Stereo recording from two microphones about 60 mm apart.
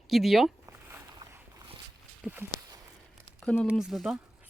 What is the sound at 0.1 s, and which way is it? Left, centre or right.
Speech, centre.